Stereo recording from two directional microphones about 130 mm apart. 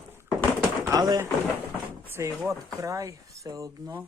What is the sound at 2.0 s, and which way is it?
Speech, 20° right (ahead or behind).